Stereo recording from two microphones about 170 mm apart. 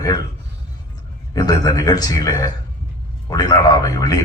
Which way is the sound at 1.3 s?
20° left (ahead or behind).